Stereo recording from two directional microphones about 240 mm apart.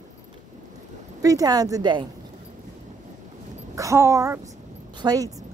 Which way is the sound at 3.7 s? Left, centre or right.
Centre.